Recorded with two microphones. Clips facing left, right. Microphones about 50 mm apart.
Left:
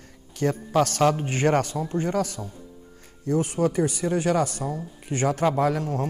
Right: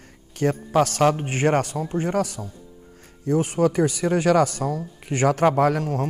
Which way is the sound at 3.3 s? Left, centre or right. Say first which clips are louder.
Right 3 dB; right.